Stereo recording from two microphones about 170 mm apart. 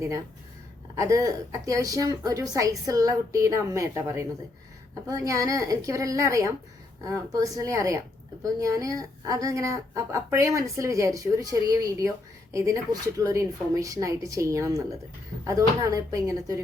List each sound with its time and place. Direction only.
0.9 s speech: 20° right (ahead or behind)